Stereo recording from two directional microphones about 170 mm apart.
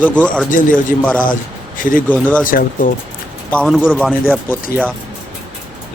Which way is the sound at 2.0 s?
10° left (ahead or behind).